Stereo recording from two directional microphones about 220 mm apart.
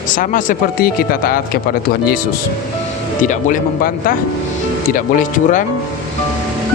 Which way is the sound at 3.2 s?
35° left (ahead or behind).